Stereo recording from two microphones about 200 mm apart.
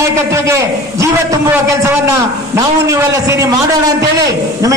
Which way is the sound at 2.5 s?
15° right (ahead or behind).